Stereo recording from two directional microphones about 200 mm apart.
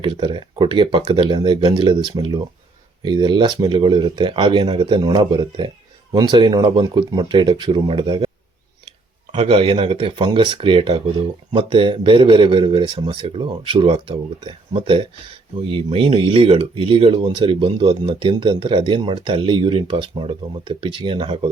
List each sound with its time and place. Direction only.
0.0 s speech: 25° right (ahead or behind)
9.3 s speech: 30° right (ahead or behind)